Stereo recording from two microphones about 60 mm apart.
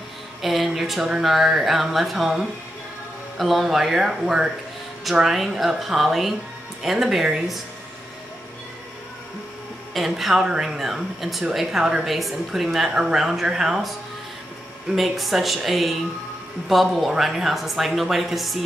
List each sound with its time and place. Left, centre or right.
0.4 s a woman's voice: centre
9.9 s a woman's voice: centre
15.0 s a woman's voice: centre